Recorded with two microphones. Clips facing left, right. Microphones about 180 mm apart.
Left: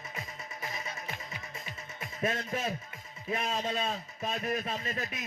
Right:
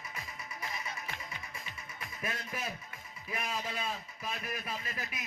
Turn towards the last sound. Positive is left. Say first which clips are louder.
# left 5 dB
turn(degrees=30)  # may be behind; listen again after turning